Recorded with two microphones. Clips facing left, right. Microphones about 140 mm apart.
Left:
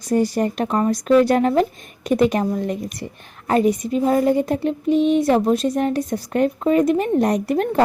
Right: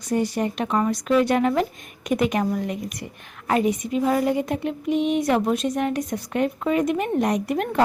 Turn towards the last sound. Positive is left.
turn(degrees=35)  # may be behind; listen again after turning